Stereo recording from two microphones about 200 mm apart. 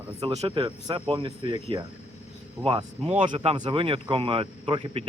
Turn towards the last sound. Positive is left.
turn(degrees=-25)  # may be behind; listen again after turning